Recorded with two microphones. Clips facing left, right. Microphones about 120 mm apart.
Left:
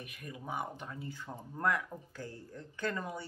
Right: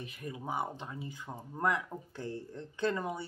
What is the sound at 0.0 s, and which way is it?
Speech, 30° right (ahead or behind).